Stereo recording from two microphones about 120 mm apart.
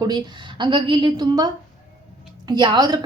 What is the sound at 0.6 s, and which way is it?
Speech, 45° right (ahead or behind).